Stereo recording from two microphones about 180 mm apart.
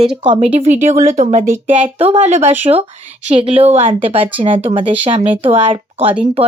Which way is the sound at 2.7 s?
30° right (ahead or behind).